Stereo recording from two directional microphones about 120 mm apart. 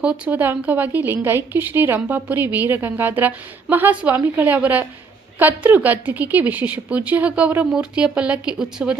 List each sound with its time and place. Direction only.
0.0 s a woman's voice: 10° right (ahead or behind)